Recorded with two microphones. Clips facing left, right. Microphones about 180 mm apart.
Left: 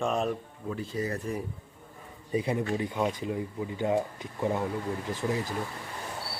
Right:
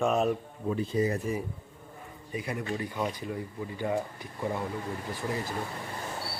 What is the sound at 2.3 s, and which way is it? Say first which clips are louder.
Speech: left 5 dB; 30° left (ahead or behind).